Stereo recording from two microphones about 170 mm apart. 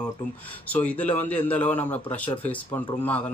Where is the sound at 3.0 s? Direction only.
10° left (ahead or behind).